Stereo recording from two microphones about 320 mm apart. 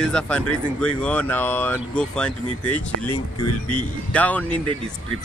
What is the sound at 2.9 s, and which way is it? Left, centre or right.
Speech, right.